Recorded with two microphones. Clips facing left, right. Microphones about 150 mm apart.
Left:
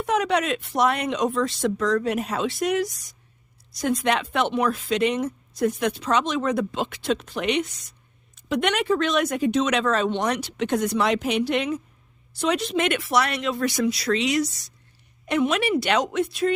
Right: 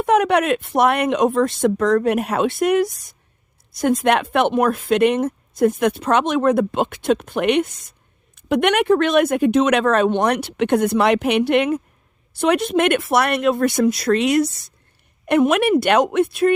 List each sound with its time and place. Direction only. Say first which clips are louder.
0.0 s speech: right 6 dB; 55° right (ahead or behind)